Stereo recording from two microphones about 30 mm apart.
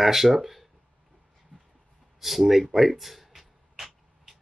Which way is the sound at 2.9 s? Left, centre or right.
Centre.